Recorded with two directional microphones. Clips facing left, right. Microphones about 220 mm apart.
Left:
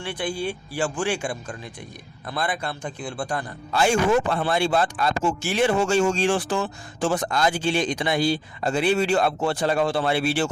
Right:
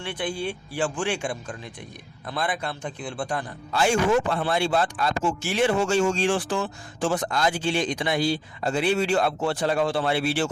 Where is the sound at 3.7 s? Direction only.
40° left (ahead or behind).